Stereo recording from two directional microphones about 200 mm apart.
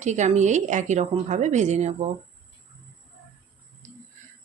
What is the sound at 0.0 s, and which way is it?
A woman's voice, 35° right (ahead or behind).